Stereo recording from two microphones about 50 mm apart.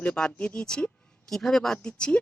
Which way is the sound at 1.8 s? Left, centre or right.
Centre.